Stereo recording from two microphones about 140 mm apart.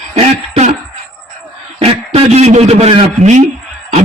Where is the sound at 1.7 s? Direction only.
45° right (ahead or behind).